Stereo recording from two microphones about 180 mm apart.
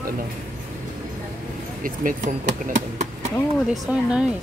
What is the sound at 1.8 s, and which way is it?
Speech, 50° right (ahead or behind).